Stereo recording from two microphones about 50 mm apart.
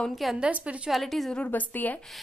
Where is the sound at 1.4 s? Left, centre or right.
Left.